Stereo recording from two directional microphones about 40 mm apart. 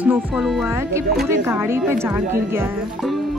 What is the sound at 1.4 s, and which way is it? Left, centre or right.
Speech, right.